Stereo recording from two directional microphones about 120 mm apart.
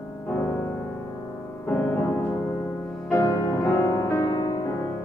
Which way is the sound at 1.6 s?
20° left (ahead or behind).